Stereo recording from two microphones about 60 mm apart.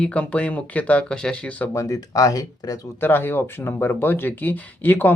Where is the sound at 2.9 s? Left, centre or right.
Left.